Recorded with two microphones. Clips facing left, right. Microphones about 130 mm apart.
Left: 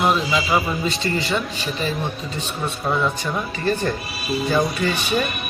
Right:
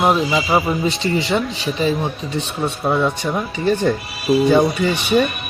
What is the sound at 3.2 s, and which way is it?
Speech, 15° right (ahead or behind).